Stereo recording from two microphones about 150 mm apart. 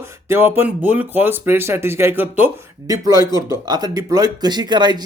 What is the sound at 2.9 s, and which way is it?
Speech, 25° right (ahead or behind).